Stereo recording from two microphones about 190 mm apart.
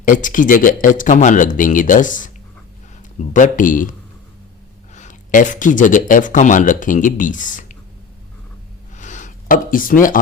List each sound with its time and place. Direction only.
0.0 s speech: 45° left (ahead or behind)
4.9 s speech: 40° left (ahead or behind)
9.0 s a sound: 40° left (ahead or behind)